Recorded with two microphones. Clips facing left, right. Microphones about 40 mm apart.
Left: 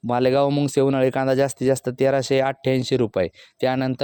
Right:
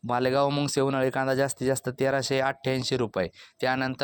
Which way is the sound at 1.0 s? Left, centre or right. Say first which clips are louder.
Left 6 dB; left.